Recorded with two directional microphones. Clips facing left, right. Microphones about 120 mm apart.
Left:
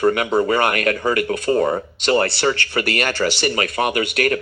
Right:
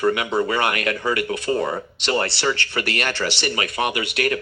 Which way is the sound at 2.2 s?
50° left (ahead or behind).